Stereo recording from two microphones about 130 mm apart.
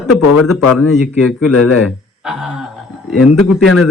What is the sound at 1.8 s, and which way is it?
Speech, 5° right (ahead or behind).